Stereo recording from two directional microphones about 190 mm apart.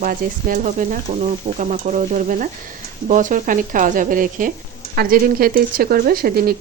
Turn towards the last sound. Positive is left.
turn(degrees=-50)  # may be behind; listen again after turning